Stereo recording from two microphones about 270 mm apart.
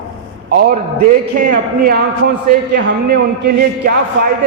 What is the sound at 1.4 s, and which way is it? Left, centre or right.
A man's voice, right.